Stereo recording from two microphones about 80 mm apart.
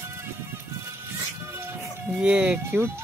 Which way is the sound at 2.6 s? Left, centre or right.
Right.